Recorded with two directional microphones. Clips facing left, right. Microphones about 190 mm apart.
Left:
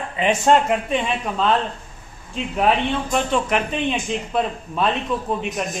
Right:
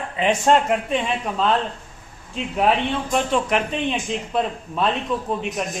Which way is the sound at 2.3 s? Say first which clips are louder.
Even; centre (ahead or behind).